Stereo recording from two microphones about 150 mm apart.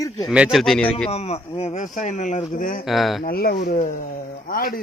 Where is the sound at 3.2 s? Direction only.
90° left.